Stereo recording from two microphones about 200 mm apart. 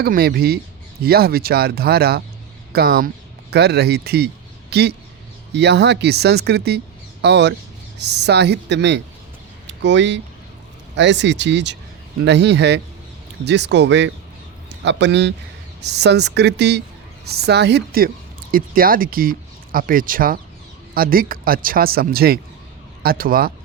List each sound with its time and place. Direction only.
0.0 s speech: 50° right (ahead or behind)